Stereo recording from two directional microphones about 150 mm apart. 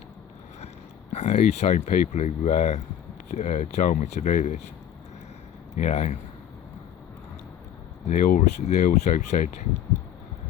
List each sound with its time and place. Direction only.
1.1 s speech: 50° left (ahead or behind)
5.7 s speech: 50° left (ahead or behind)
8.1 s speech: 55° left (ahead or behind)